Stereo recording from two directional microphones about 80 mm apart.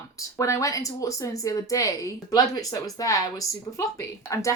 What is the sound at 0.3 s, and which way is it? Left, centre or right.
Speech, left.